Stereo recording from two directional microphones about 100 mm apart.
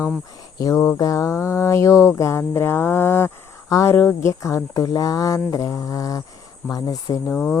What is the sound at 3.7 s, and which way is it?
Speech, 30° left (ahead or behind).